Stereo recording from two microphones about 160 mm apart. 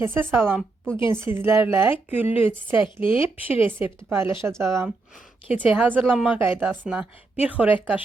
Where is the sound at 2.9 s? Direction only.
35° left (ahead or behind).